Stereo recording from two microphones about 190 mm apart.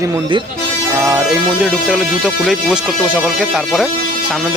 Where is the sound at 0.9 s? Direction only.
15° right (ahead or behind).